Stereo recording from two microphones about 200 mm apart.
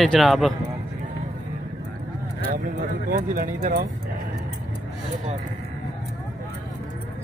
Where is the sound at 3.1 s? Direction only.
45° right (ahead or behind).